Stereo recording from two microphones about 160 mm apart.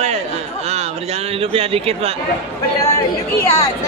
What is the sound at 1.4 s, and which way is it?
Speech, 35° right (ahead or behind).